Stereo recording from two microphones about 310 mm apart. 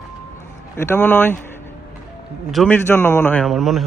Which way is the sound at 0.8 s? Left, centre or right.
Centre.